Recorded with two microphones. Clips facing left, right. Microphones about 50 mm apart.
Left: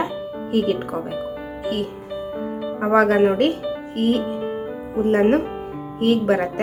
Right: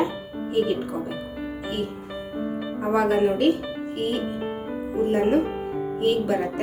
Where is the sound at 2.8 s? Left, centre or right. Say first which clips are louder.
Left 5 dB; left.